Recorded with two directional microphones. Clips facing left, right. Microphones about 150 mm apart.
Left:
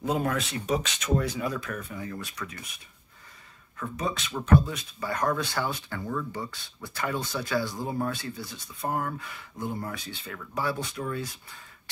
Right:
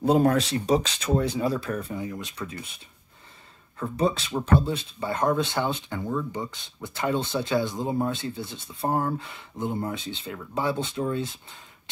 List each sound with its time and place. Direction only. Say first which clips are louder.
0.0 s speech: right 7 dB; 35° right (ahead or behind)
2.0 s speech: right 3 dB; 20° right (ahead or behind)